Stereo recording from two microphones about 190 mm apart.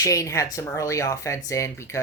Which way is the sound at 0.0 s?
15° left (ahead or behind).